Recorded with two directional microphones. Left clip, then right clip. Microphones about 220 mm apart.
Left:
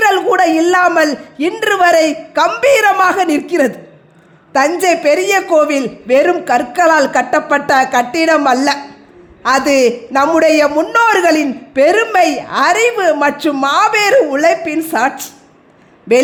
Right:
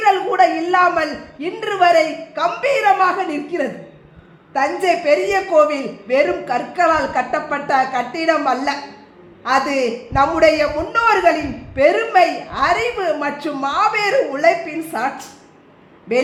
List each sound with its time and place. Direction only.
0.0 s a man's voice: 45° left (ahead or behind)